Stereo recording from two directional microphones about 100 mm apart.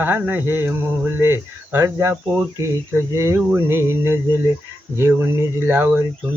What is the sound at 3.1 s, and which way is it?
Speech, 30° right (ahead or behind).